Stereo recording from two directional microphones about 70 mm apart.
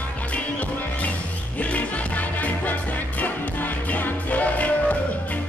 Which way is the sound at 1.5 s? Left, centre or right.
Left.